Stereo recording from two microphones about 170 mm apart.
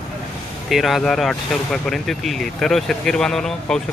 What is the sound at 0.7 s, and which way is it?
Speech, centre (ahead or behind).